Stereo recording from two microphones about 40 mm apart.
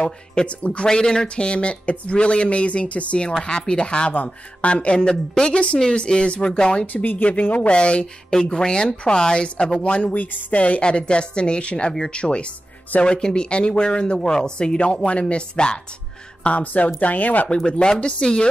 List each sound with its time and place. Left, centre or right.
0.0 s speech: left
0.8 s speech: centre
4.1 s speech: left
4.6 s speech: left
5.5 s speech: left
5.8 s speech: left
6.9 s speech: left
7.7 s speech: left
8.3 s speech: centre
10.2 s speech: left
10.6 s speech: left
16.4 s speech: left
17.6 s speech: left